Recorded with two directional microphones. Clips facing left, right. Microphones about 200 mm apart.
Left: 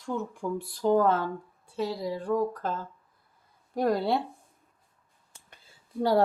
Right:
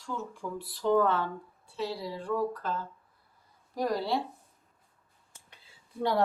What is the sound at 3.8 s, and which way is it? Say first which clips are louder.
Speech: left 4 dB; 55° left (ahead or behind).